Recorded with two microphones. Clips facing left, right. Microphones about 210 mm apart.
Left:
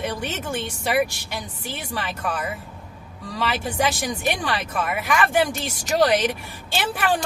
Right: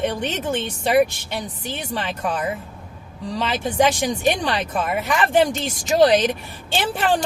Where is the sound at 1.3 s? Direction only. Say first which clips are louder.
Right 4 dB; 20° right (ahead or behind).